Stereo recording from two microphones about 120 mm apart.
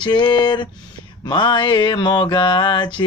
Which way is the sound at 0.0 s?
40° left (ahead or behind).